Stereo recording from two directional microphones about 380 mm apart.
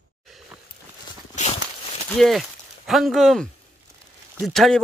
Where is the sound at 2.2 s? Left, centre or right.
Centre.